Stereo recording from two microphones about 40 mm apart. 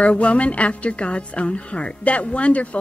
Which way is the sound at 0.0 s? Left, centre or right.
Left.